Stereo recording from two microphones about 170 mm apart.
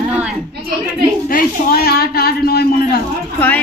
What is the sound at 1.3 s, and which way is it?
A man's voice, 65° left (ahead or behind).